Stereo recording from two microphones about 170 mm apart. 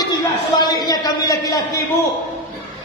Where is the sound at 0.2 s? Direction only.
25° left (ahead or behind).